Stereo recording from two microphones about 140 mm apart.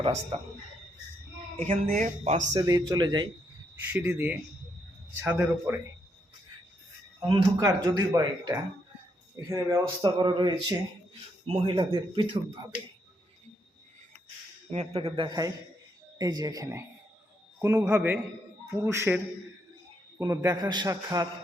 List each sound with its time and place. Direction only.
0.0 s speech: 45° right (ahead or behind)
1.5 s speech: 55° right (ahead or behind)
2.5 s a man's voice: 25° right (ahead or behind)
3.9 s a man's voice: 15° right (ahead or behind)
7.6 s a man's voice: 25° right (ahead or behind)
10.2 s speech: 35° right (ahead or behind)
14.7 s a man's voice: 50° right (ahead or behind); by 21.2 s 25° right (ahead or behind)